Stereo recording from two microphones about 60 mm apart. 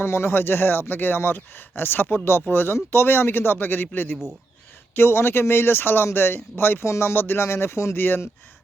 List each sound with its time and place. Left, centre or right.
0.0 s speech: left
7.9 s speech: left